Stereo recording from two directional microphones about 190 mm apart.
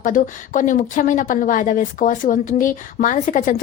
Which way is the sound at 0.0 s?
45° left (ahead or behind).